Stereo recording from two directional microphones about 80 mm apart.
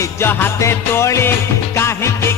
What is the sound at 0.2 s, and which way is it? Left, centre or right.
Music, left.